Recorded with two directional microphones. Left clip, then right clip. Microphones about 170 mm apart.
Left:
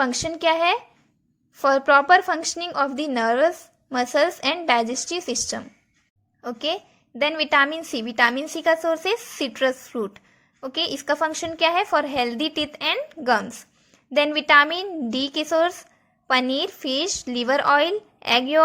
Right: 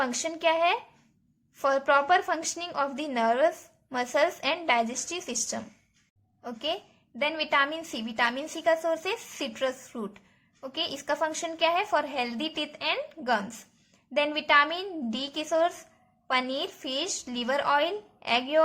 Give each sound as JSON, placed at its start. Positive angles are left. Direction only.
{"t": 0.0, "sound": "a woman's voice", "side_deg": 30}